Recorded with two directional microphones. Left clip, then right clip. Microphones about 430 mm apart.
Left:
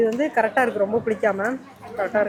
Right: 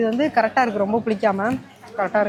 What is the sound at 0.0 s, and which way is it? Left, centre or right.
A woman's voice, right.